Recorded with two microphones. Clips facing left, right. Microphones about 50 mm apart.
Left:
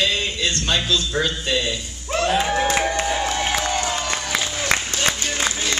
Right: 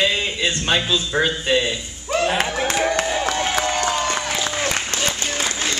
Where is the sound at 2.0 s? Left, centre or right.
Centre.